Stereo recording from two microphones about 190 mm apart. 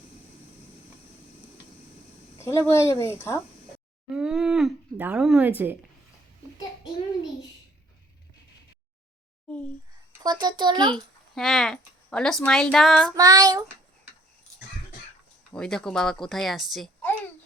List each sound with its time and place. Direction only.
2.4 s speech: 15° left (ahead or behind)
4.1 s a woman's voice: 5° right (ahead or behind)
10.1 s a child's voice: 20° right (ahead or behind)
10.9 s speech: centre (ahead or behind)
13.1 s a child's voice: 20° right (ahead or behind)
15.5 s speech: 5° left (ahead or behind)